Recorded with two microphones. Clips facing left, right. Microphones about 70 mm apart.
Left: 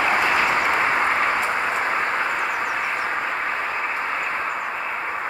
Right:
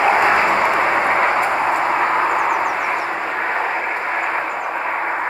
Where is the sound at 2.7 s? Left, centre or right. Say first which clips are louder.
Right 4 dB; right.